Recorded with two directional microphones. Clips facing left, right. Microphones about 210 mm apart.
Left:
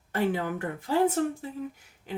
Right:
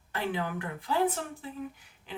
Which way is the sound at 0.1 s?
45° left (ahead or behind).